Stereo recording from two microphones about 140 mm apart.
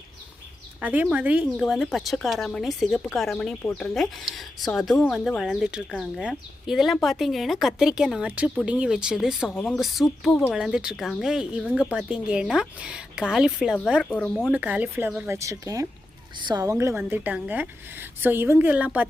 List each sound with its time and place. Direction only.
0.8 s speech: 10° right (ahead or behind)
14.1 s speech: 10° left (ahead or behind)
14.5 s a woman's voice: 10° right (ahead or behind)
15.4 s a woman's voice: 20° right (ahead or behind)